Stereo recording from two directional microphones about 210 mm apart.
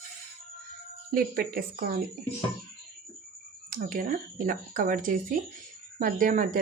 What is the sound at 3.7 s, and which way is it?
Speech, 40° right (ahead or behind).